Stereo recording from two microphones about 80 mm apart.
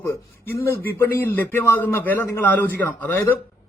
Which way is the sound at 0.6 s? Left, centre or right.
Left.